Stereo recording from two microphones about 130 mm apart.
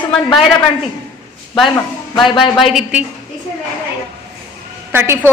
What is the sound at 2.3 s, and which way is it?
Speech, 40° left (ahead or behind).